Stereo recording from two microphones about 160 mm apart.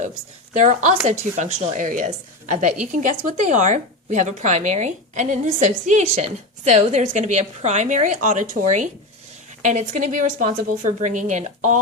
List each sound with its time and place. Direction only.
0.5 s speech: 50° right (ahead or behind)